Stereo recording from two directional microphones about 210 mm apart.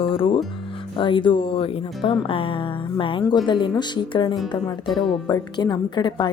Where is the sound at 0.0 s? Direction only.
25° left (ahead or behind).